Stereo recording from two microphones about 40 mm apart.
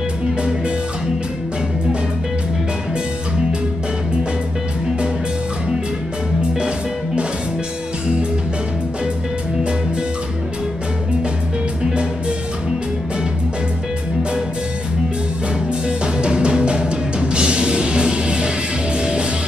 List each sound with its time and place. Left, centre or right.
0.4 s music: centre
11.8 s music: right
16.0 s music: right